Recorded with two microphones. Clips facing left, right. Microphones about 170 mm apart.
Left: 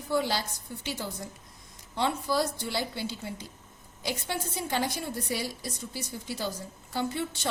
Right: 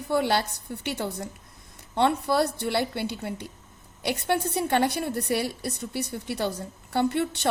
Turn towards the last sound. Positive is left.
turn(degrees=-65)  # may be behind; listen again after turning